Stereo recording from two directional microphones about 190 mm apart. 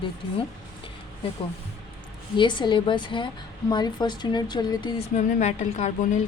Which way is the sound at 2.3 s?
25° left (ahead or behind).